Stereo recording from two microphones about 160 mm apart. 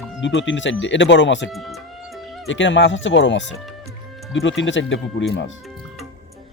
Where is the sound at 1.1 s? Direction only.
90° left.